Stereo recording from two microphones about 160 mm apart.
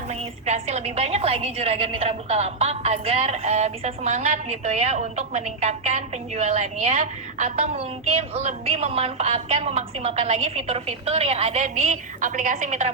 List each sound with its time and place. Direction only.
0.1 s a woman's voice: 45° right (ahead or behind)